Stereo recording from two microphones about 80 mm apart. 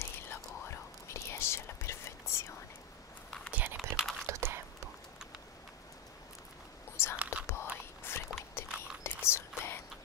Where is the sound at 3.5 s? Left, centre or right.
Right.